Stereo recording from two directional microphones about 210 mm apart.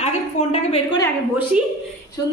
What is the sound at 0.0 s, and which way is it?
A woman's voice, 30° left (ahead or behind).